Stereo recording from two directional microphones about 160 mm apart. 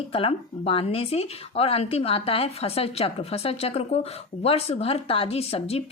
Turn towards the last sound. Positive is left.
turn(degrees=40)  # may be behind; listen again after turning